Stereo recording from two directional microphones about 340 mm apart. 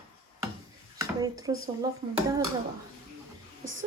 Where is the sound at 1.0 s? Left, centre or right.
Centre.